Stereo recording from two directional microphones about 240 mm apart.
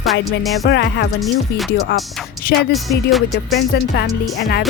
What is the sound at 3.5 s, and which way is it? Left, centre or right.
Speech, left.